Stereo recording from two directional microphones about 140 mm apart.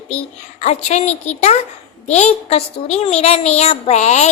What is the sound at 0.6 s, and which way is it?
A child's voice, 55° left (ahead or behind).